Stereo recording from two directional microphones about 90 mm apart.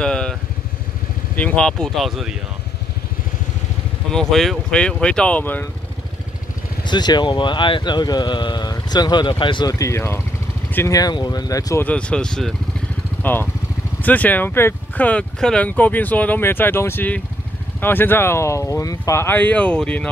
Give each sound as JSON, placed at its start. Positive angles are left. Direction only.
{"t": 0.0, "sound": "vehicle", "side_deg": 10}
{"t": 1.3, "sound": "speech", "side_deg": 15}
{"t": 4.1, "sound": "speech", "side_deg": 5}
{"t": 5.4, "sound": "speech", "side_deg": 20}
{"t": 6.8, "sound": "speech", "side_deg": 55}
{"t": 9.7, "sound": "speech", "side_deg": 35}
{"t": 10.9, "sound": "speech", "side_deg": 45}
{"t": 11.8, "sound": "speech", "side_deg": 15}
{"t": 13.2, "sound": "speech", "side_deg": 25}
{"t": 19.2, "sound": "speech", "side_deg": 20}